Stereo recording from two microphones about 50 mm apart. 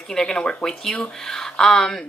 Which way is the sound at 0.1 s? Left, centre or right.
Centre.